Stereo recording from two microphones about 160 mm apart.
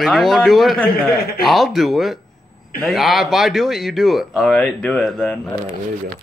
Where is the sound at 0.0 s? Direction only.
Centre (ahead or behind).